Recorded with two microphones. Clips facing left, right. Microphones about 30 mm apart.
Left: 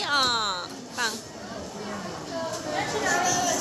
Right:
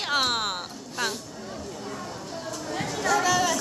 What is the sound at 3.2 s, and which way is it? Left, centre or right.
Speech, right.